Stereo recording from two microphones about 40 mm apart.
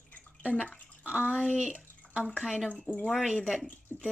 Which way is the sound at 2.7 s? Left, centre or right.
Left.